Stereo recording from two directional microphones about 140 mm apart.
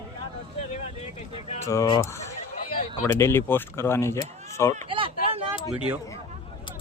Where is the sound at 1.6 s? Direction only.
20° left (ahead or behind).